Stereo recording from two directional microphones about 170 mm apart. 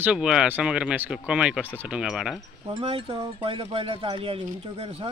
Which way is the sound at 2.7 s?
30° right (ahead or behind).